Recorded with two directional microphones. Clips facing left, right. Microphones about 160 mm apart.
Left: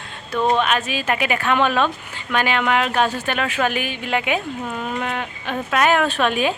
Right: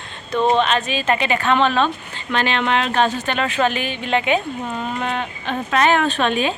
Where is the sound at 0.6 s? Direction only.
10° left (ahead or behind).